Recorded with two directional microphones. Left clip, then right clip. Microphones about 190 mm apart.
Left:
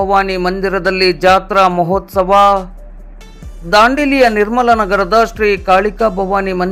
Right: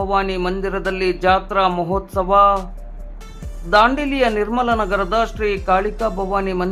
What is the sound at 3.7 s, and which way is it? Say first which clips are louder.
A man's voice: left 5 dB; 25° left (ahead or behind).